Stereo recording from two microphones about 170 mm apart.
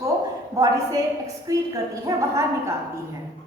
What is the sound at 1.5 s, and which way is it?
A woman's voice, 20° right (ahead or behind).